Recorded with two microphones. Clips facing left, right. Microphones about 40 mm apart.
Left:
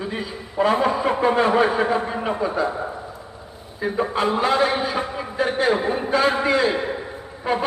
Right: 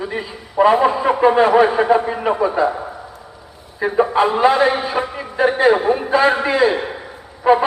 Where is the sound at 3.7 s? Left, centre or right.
Centre.